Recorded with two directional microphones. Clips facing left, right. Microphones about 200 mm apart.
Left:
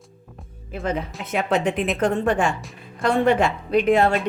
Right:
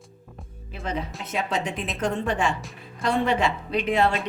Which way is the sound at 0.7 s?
55° left (ahead or behind).